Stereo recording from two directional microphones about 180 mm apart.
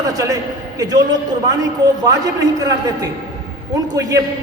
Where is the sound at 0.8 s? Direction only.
20° right (ahead or behind).